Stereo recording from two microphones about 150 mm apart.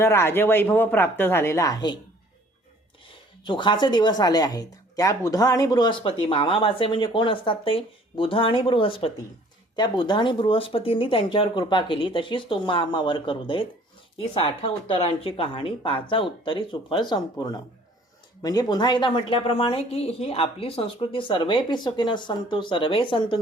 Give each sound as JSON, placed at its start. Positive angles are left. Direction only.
{"t": 0.0, "sound": "speech", "side_deg": 15}
{"t": 3.4, "sound": "speech", "side_deg": 30}